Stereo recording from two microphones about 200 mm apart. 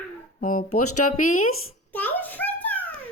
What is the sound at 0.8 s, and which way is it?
Speech, 90° left.